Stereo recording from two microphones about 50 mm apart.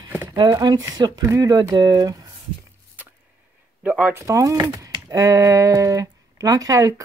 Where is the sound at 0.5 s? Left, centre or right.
Right.